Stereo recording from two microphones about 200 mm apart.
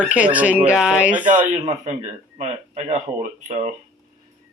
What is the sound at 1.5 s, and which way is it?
Speech, 35° right (ahead or behind).